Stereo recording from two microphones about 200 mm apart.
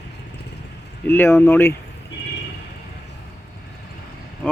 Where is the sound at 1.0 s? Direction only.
10° left (ahead or behind).